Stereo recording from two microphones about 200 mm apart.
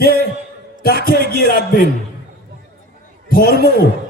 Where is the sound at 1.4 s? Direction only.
45° left (ahead or behind).